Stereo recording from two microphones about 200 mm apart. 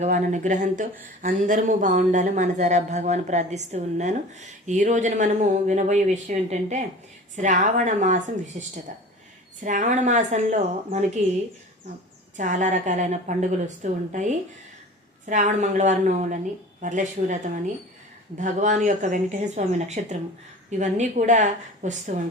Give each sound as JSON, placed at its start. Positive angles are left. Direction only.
{"t": 0.0, "sound": "speech", "side_deg": -35}
{"t": 12.4, "sound": "speech", "side_deg": -35}